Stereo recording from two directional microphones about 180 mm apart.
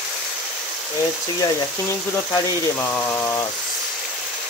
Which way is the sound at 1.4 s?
20° left (ahead or behind).